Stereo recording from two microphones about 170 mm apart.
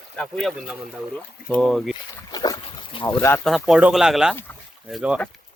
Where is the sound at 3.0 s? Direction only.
10° left (ahead or behind).